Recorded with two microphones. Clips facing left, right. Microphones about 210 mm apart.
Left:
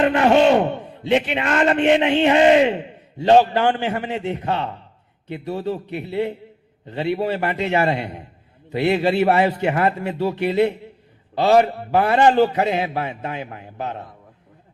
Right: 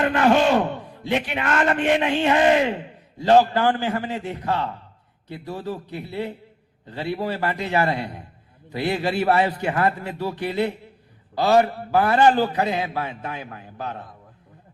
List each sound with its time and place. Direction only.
0.0 s a man's voice: 20° left (ahead or behind)